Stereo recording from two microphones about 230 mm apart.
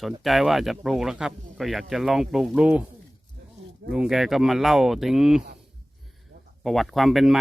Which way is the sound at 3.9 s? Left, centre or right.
Centre.